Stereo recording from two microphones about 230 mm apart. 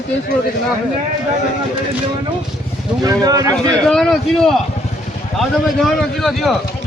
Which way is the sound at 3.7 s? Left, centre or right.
Centre.